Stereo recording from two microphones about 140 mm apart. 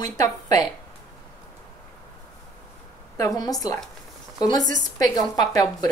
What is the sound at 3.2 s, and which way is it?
A woman's voice, 25° left (ahead or behind).